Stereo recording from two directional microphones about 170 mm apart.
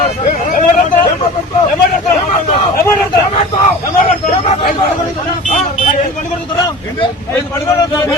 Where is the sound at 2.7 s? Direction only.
15° left (ahead or behind).